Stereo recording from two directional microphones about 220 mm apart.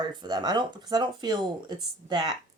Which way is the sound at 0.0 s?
20° right (ahead or behind).